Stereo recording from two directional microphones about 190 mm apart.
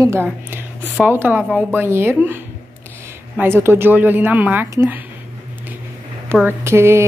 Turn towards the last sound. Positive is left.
turn(degrees=-15)  # may be behind; listen again after turning